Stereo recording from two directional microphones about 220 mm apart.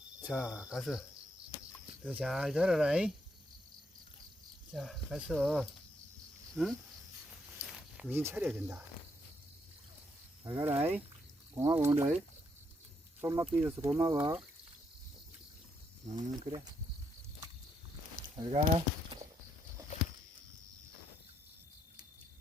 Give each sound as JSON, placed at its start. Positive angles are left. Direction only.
{"t": 0.3, "sound": "speech", "side_deg": 0}
{"t": 2.0, "sound": "speech", "side_deg": -5}
{"t": 4.7, "sound": "speech", "side_deg": 0}
{"t": 10.4, "sound": "speech", "side_deg": -15}
{"t": 13.4, "sound": "speech", "side_deg": -10}
{"t": 16.1, "sound": "speech", "side_deg": -25}
{"t": 18.3, "sound": "speech", "side_deg": -20}